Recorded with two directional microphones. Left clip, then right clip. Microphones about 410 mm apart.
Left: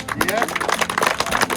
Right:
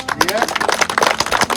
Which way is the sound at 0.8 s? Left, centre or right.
Centre.